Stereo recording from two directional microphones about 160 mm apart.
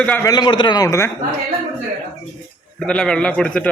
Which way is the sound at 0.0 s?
10° left (ahead or behind).